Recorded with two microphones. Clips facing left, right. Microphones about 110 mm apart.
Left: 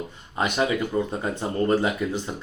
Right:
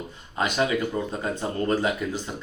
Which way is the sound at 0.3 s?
20° left (ahead or behind).